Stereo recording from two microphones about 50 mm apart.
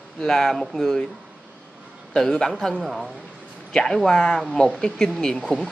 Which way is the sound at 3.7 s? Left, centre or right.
Centre.